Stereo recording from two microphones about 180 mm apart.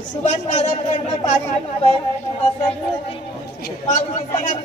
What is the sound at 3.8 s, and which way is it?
Speech, 40° left (ahead or behind).